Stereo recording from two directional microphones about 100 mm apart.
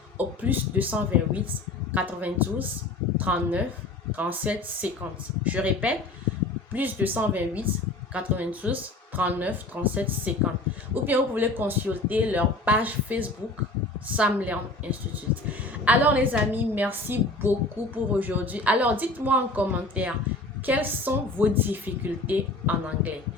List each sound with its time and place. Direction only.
0.2 s speech: 15° right (ahead or behind)